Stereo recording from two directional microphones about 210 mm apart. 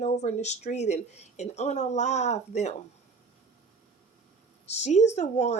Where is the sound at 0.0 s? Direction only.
35° left (ahead or behind).